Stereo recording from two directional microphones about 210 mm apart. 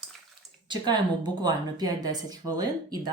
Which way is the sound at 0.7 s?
20° right (ahead or behind).